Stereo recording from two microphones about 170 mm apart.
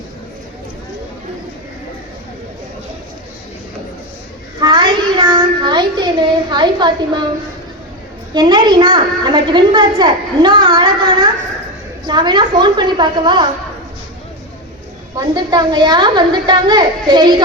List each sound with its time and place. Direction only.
4.6 s a sound: 25° right (ahead or behind)
8.3 s a woman's voice: 25° right (ahead or behind)
15.4 s a woman's voice: 25° right (ahead or behind)